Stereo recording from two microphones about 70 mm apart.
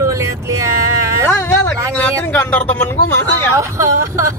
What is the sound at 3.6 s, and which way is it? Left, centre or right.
Speech, right.